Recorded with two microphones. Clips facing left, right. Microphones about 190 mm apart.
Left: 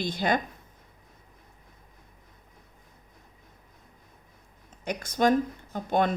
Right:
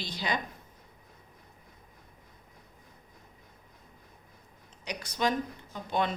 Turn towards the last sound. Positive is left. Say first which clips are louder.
# left 5 dB
turn(degrees=50)  # may be behind; listen again after turning